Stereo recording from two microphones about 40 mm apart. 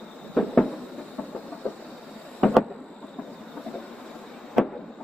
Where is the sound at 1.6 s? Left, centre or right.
Left.